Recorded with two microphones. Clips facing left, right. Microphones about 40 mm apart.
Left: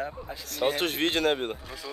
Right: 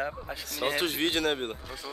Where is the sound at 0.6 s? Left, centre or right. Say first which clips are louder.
Left 2 dB; centre.